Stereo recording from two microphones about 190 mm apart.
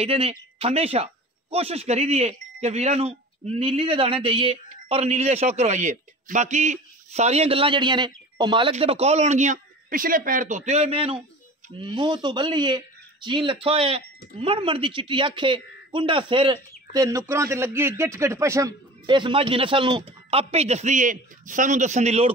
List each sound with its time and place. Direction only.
0.0 s a man's voice: 30° right (ahead or behind)